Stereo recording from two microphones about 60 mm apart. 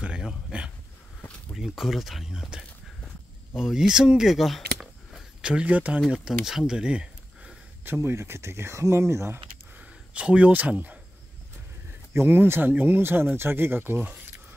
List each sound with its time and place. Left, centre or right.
0.0 s a sound: centre
1.5 s speech: centre
3.5 s speech: centre
5.4 s speech: centre
6.0 s speech: centre
6.8 s a sound: centre
7.8 s speech: right
9.8 s speech: right
12.1 s speech: right